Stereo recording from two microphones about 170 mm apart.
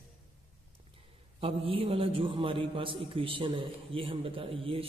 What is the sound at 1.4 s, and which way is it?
A man's voice, 35° right (ahead or behind).